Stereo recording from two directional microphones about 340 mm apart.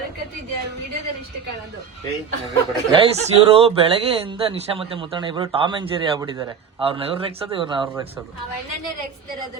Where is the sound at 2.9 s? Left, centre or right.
Centre.